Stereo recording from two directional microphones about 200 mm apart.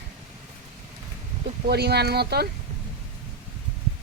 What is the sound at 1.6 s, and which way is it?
Speech, 55° right (ahead or behind).